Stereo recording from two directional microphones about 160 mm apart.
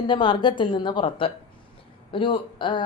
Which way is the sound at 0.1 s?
30° left (ahead or behind).